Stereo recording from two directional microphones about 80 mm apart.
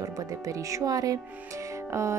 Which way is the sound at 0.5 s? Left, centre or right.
Right.